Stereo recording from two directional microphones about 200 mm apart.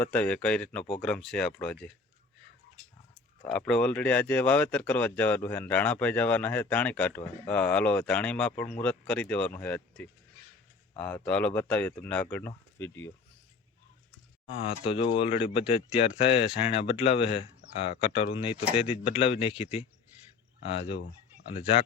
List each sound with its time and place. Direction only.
0.0 s speech: 5° left (ahead or behind)
3.4 s speech: 5° left (ahead or behind)
14.4 s speech: 30° left (ahead or behind)
20.7 s speech: 30° left (ahead or behind)